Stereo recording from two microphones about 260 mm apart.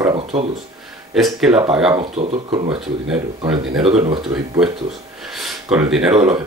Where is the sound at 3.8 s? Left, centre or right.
Right.